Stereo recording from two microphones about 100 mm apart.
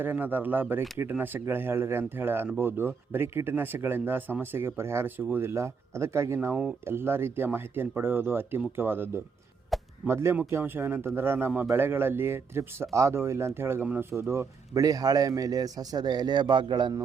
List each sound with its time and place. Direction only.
0.0 s speech: 20° right (ahead or behind)
6.5 s speech: 10° right (ahead or behind)
6.8 s speech: 25° right (ahead or behind)
9.7 s chop: centre (ahead or behind)
10.1 s speech: 25° right (ahead or behind)
14.1 s a man's voice: 25° right (ahead or behind); by 16.9 s 50° right (ahead or behind)